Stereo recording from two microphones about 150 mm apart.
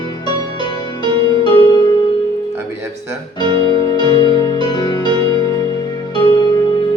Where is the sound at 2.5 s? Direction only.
15° right (ahead or behind).